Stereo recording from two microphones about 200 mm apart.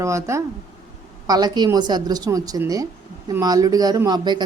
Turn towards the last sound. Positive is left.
turn(degrees=-20)  # may be behind; listen again after turning